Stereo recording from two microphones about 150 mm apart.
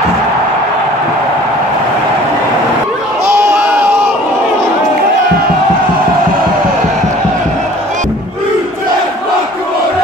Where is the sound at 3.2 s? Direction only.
15° right (ahead or behind).